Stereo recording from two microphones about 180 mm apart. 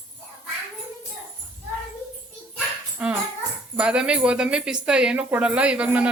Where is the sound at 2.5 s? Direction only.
5° right (ahead or behind).